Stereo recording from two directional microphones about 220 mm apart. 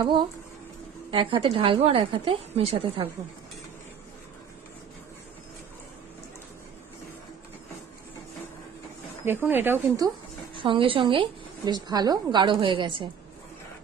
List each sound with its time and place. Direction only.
0.0 s a woman's voice: 20° right (ahead or behind)
9.2 s speech: 10° right (ahead or behind)
10.5 s a woman's voice: 25° right (ahead or behind)